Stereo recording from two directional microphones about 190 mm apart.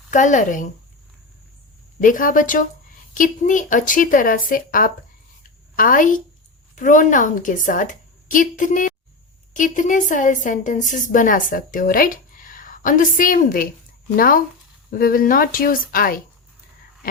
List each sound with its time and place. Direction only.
0.1 s speech: 40° left (ahead or behind)
2.0 s a woman's voice: 45° left (ahead or behind)